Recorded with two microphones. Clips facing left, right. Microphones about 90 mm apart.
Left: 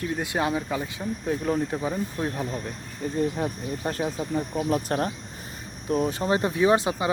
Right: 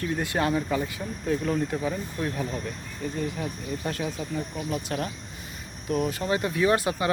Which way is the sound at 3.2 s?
35° left (ahead or behind).